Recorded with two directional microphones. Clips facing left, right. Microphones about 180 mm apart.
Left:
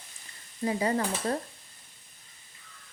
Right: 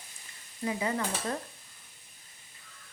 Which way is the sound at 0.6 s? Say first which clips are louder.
Left 4 dB; 35° left (ahead or behind).